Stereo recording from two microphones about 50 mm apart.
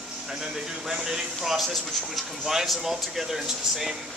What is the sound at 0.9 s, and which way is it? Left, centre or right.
Speech, centre.